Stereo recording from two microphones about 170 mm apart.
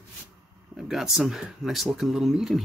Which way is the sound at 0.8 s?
Centre (ahead or behind).